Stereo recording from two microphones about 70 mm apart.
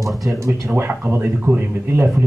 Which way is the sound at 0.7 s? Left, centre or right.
Right.